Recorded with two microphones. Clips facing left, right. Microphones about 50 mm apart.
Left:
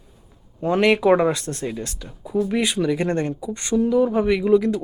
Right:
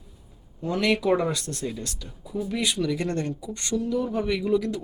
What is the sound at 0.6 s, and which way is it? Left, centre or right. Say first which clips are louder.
Speech: left 7 dB; left.